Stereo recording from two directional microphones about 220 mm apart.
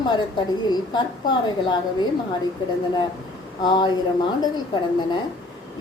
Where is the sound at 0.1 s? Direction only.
20° left (ahead or behind).